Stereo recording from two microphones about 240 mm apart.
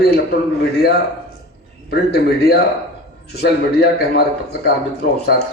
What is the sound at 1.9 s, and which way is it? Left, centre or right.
A man's voice, left.